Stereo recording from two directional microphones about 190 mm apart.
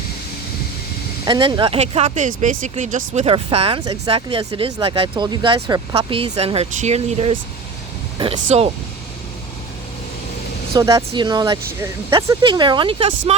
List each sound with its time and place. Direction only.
1.2 s speech: 25° right (ahead or behind)
3.8 s speech: 20° right (ahead or behind)
10.8 s speech: 20° right (ahead or behind)